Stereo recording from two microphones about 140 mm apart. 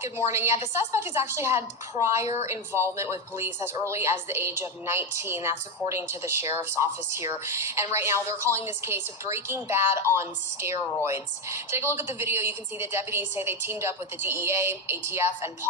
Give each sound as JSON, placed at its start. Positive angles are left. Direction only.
{"t": 0.0, "sound": "a woman's voice", "side_deg": -20}